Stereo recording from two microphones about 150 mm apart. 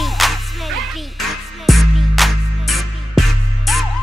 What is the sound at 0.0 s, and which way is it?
Music, centre (ahead or behind).